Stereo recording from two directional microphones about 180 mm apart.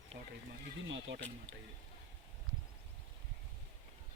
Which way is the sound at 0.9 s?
90° right.